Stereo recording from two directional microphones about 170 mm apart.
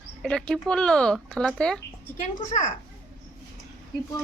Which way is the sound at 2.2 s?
50° left (ahead or behind).